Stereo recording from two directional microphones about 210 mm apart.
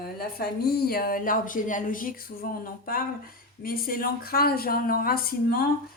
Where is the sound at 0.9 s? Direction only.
45° left (ahead or behind).